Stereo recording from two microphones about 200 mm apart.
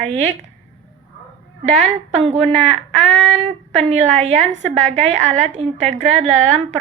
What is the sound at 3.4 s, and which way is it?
A woman's voice, 35° right (ahead or behind).